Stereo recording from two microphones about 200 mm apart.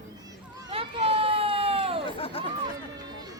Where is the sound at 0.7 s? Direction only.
30° right (ahead or behind).